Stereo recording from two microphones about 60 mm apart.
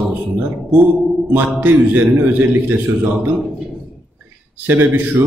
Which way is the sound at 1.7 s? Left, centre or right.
Right.